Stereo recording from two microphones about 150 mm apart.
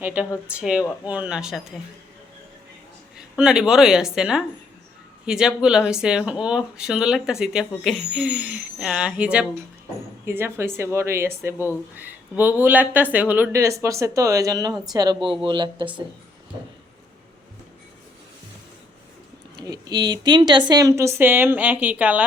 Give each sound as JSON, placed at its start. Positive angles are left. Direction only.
{"t": 0.0, "sound": "speech", "side_deg": -10}
{"t": 3.2, "sound": "speech", "side_deg": -5}
{"t": 19.5, "sound": "speech", "side_deg": -25}